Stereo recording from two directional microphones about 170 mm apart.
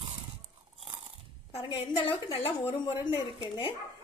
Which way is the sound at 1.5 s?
30° left (ahead or behind).